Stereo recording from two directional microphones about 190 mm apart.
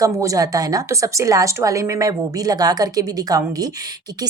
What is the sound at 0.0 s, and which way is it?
Speech, 15° right (ahead or behind).